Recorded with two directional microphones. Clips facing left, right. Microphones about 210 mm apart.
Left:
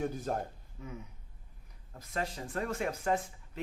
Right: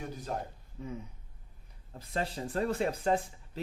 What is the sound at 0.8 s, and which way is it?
Speech, 30° right (ahead or behind).